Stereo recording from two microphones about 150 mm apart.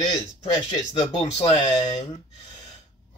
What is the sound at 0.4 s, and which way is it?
A man's voice, 45° left (ahead or behind).